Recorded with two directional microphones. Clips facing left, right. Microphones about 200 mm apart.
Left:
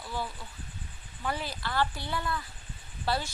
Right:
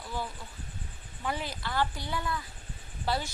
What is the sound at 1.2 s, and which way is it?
A woman's voice, 15° right (ahead or behind).